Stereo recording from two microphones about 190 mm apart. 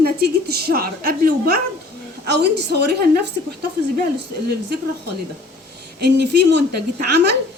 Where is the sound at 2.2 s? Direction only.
60° right (ahead or behind).